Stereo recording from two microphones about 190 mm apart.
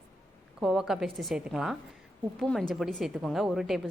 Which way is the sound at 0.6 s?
Centre (ahead or behind).